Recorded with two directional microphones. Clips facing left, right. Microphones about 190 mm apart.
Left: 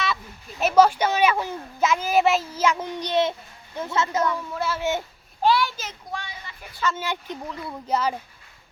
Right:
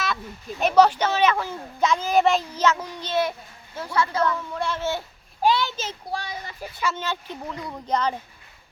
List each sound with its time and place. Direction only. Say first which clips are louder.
0.6 s a child's voice: even; 10° left (ahead or behind)
2.7 s a child's voice: left 2 dB; 20° left (ahead or behind)
4.2 s a child's voice: right 1 dB; 10° left (ahead or behind)
4.8 s a child's voice: left 2 dB; 20° left (ahead or behind)
5.4 s a child's voice: left 1 dB; 20° right (ahead or behind); by 6.7 s 40° right (ahead or behind)
6.9 s speech: left 1 dB; 15° left (ahead or behind)